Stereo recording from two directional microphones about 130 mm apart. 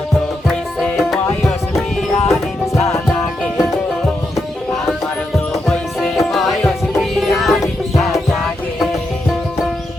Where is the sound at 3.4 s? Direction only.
Centre (ahead or behind).